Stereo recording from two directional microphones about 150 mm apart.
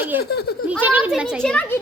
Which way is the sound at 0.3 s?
90° left.